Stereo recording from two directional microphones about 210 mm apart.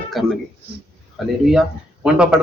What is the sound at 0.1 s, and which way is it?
Speech, centre (ahead or behind).